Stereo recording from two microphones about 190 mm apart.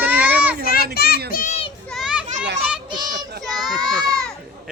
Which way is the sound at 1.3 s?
45° left (ahead or behind).